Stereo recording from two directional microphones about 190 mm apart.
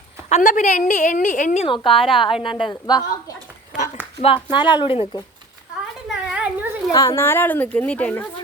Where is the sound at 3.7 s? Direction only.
40° left (ahead or behind).